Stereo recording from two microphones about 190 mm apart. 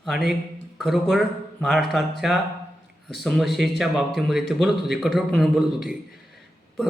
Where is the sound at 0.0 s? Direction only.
Centre (ahead or behind).